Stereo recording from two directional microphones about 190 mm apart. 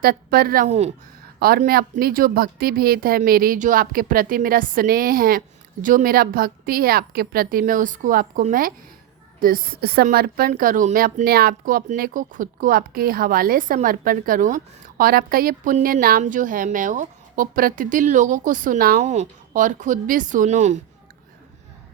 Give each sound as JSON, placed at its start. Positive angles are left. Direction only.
{"t": 0.0, "sound": "speech", "side_deg": -50}
{"t": 0.7, "sound": "speech", "side_deg": -35}
{"t": 1.4, "sound": "speech", "side_deg": -50}